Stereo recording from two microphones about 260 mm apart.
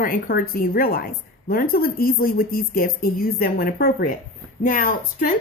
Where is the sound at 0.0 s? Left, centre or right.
Left.